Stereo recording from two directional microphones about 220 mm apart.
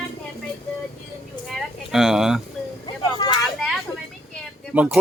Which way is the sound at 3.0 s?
15° left (ahead or behind).